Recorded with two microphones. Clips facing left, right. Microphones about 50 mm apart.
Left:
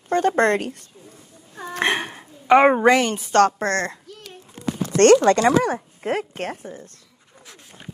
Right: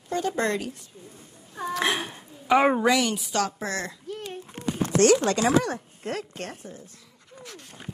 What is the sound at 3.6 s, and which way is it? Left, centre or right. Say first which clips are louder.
Speech: left 8 dB; left.